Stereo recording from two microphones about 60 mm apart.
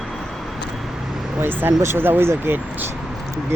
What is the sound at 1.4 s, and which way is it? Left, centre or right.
Speech, right.